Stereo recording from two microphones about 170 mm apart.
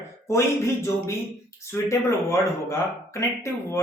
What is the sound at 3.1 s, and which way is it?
Speech, 15° left (ahead or behind).